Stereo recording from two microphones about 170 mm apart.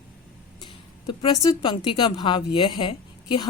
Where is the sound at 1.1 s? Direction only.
25° left (ahead or behind).